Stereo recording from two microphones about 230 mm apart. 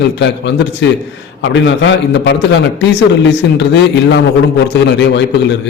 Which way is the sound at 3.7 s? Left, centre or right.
Left.